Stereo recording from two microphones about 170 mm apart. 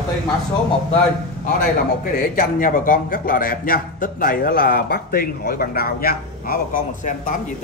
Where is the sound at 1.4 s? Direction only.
45° left (ahead or behind).